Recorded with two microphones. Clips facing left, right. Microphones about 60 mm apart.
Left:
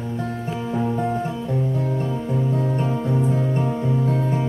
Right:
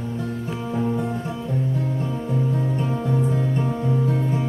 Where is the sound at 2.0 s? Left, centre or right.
Centre.